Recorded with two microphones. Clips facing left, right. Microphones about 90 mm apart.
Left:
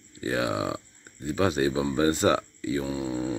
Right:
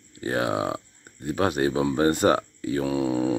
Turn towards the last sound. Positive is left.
turn(degrees=-90)